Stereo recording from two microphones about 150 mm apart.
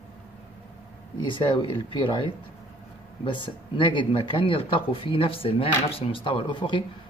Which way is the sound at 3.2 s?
35° left (ahead or behind).